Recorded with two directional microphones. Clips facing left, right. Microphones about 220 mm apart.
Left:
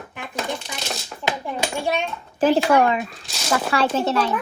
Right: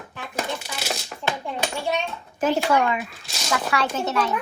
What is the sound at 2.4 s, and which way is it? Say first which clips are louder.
Speech: left 4 dB; 30° left (ahead or behind).